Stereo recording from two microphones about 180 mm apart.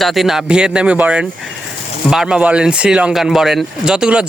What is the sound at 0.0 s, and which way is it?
Speech, centre (ahead or behind).